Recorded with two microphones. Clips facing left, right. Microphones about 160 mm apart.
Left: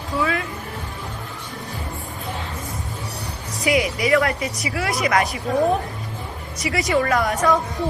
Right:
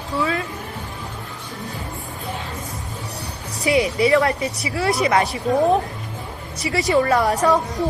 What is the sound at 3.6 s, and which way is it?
A woman's voice, 30° right (ahead or behind).